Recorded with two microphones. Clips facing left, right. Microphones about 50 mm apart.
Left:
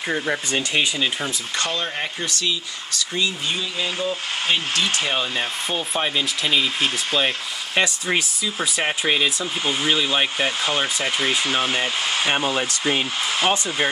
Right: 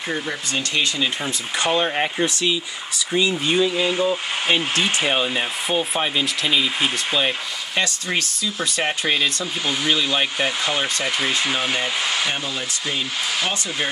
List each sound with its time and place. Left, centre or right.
0.3 s speech: centre
1.6 s speech: right
3.7 s speech: centre
7.7 s speech: centre
10.4 s speech: centre
12.4 s speech: left
13.4 s speech: left